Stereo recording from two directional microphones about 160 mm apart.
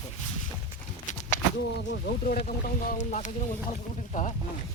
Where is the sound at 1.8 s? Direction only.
90° left.